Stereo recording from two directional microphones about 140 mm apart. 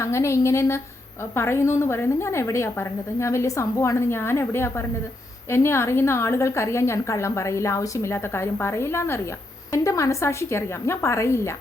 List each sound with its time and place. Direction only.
0.0 s a woman's voice: 20° left (ahead or behind)